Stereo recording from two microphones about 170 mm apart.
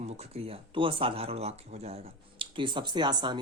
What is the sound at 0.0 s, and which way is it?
Speech, 35° right (ahead or behind).